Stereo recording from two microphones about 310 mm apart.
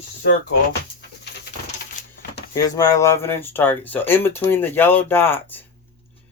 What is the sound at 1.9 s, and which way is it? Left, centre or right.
Speech, centre.